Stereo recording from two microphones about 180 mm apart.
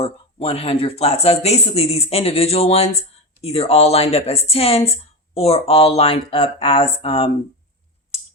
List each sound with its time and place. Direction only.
0.0 s a woman's voice: 35° left (ahead or behind)